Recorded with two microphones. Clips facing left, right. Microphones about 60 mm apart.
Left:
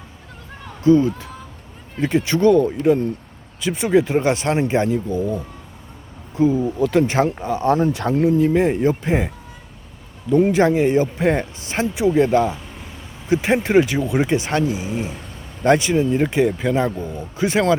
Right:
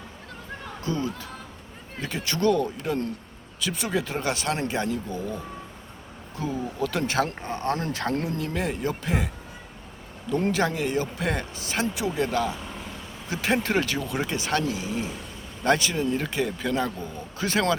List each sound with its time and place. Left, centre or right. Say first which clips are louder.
0.9 s speech: left 15 dB; left
10.3 s speech: left 9 dB; centre